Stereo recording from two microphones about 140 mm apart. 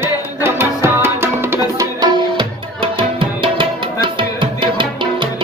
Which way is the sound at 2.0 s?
35° right (ahead or behind).